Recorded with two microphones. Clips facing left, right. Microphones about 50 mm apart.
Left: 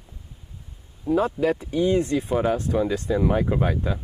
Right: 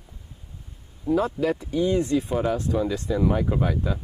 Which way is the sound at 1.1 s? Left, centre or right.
Left.